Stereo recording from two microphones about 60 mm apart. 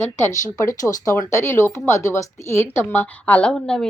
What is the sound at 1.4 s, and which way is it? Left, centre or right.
Speech, left.